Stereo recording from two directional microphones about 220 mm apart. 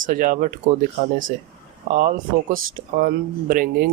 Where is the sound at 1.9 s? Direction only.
35° right (ahead or behind).